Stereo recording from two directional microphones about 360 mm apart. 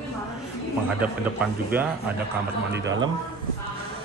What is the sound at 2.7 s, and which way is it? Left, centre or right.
Speech, right.